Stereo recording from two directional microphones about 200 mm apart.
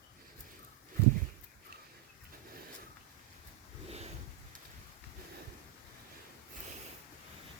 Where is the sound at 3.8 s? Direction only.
30° right (ahead or behind).